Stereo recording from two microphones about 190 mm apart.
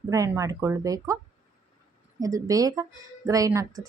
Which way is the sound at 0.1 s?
15° right (ahead or behind).